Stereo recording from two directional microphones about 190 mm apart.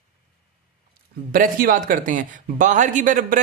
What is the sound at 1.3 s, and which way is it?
A man's voice, 45° right (ahead or behind).